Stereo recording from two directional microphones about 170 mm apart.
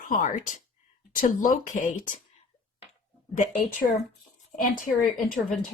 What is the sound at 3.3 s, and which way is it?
Speech, 50° left (ahead or behind).